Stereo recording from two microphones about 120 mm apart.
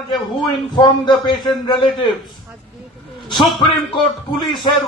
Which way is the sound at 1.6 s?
40° left (ahead or behind).